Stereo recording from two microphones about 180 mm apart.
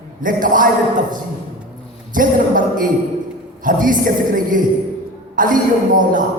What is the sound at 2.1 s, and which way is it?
A woman's voice, 50° right (ahead or behind).